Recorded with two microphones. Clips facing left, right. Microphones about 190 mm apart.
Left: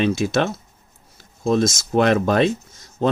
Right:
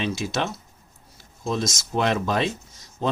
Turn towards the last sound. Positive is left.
turn(degrees=55)  # may be behind; listen again after turning